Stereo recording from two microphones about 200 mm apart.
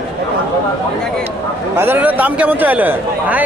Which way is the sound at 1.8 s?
10° right (ahead or behind).